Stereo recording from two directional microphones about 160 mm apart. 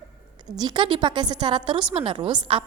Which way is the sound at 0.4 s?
25° right (ahead or behind).